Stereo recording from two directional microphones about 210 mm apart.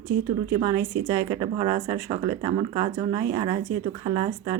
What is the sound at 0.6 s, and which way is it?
Speech, 15° right (ahead or behind).